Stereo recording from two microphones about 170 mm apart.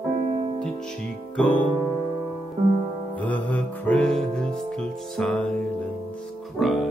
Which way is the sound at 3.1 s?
10° left (ahead or behind).